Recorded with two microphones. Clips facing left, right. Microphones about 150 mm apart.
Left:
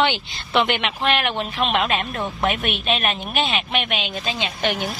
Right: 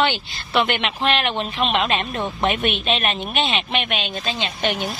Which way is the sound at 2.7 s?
Centre (ahead or behind).